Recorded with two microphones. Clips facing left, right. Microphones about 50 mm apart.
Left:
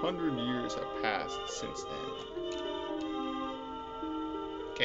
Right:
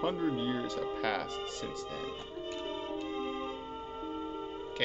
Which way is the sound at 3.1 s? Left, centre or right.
Right.